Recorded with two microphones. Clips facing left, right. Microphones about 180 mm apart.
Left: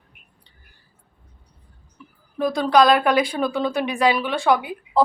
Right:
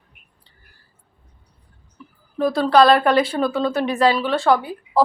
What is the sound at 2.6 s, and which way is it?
Speech, 15° left (ahead or behind).